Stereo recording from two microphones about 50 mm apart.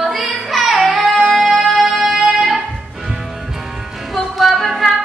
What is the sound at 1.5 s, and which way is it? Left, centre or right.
Music, right.